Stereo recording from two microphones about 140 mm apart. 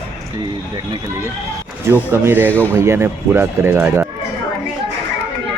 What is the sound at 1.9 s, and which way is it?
Speech, 15° right (ahead or behind).